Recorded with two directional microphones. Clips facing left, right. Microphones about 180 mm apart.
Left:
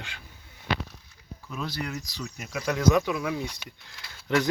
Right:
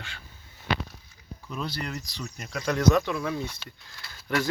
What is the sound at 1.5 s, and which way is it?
Speech, 5° left (ahead or behind).